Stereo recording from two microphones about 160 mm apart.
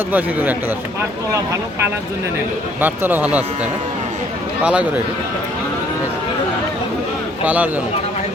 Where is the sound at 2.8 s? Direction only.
10° right (ahead or behind).